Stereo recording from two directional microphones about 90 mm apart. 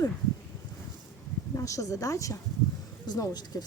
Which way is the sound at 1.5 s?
35° left (ahead or behind).